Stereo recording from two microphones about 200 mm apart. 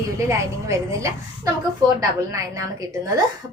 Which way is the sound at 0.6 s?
15° right (ahead or behind).